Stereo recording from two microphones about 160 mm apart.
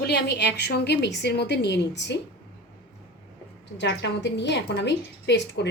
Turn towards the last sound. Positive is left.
turn(degrees=90)